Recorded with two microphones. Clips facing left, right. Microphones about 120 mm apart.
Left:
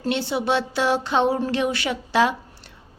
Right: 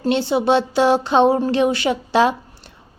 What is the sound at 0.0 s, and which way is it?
A woman's voice, 25° right (ahead or behind).